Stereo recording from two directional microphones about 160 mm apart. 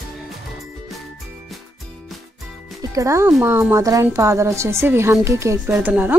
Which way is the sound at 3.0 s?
20° right (ahead or behind).